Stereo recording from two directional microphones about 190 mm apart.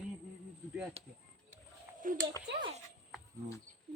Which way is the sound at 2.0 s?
45° right (ahead or behind).